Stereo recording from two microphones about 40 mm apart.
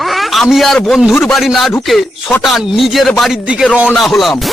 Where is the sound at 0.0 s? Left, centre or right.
Centre.